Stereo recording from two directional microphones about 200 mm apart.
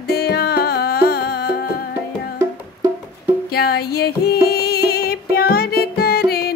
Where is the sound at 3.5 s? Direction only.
50° left (ahead or behind).